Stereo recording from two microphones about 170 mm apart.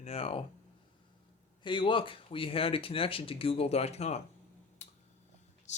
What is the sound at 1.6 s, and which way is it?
Speech, 30° left (ahead or behind).